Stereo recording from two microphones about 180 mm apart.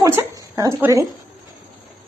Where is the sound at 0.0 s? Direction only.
15° right (ahead or behind).